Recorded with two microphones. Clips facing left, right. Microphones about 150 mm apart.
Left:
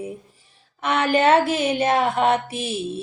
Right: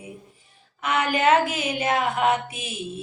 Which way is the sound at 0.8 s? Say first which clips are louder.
Left 3 dB; 30° left (ahead or behind).